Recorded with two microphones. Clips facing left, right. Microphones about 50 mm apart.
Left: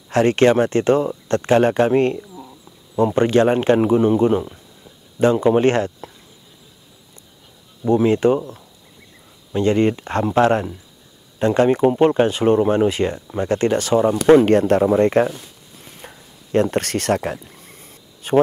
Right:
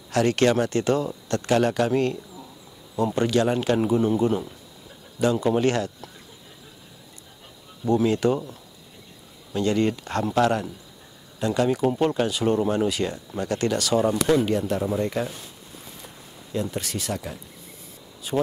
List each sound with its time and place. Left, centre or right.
0.1 s speech: left
7.8 s speech: left
9.5 s speech: left
14.5 s speech: left
16.5 s a man's voice: left